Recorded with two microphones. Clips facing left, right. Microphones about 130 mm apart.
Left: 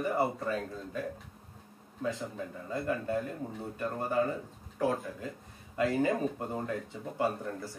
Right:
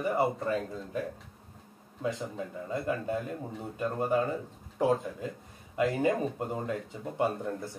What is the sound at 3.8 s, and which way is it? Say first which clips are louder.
Speech: right 5 dB; 15° right (ahead or behind).